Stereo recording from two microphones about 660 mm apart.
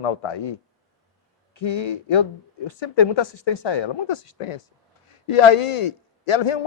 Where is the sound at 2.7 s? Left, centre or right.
Left.